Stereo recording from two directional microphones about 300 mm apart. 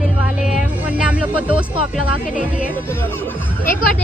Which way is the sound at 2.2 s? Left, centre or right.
Left.